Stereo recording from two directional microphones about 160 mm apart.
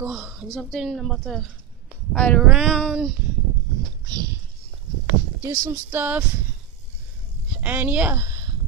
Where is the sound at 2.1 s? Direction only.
5° left (ahead or behind).